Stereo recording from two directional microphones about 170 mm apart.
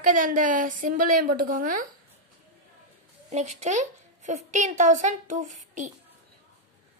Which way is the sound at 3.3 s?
40° right (ahead or behind).